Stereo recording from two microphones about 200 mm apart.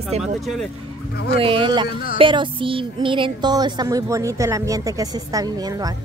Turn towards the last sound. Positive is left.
turn(degrees=-20)  # may be behind; listen again after turning